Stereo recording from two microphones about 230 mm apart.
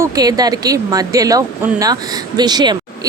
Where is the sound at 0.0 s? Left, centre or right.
Centre.